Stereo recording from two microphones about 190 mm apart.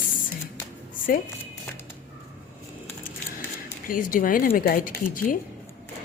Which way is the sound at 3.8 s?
45° left (ahead or behind).